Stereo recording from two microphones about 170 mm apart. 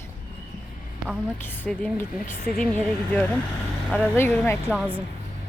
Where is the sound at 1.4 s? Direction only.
10° left (ahead or behind).